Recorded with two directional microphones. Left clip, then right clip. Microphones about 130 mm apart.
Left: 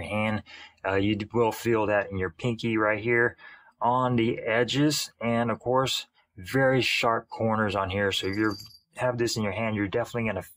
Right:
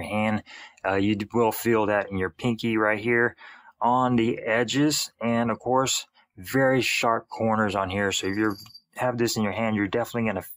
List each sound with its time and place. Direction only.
0.0 s speech: 25° right (ahead or behind)